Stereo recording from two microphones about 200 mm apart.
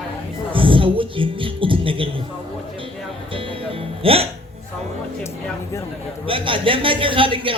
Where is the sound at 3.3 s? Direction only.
25° right (ahead or behind).